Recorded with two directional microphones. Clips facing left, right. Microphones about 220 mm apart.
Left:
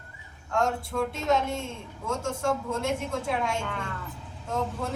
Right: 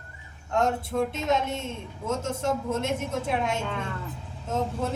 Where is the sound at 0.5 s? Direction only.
20° right (ahead or behind).